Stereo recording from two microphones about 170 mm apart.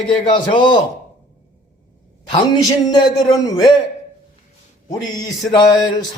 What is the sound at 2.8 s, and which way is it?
Speech, 25° left (ahead or behind).